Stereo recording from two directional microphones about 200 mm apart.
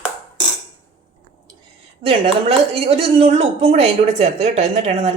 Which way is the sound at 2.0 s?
30° right (ahead or behind).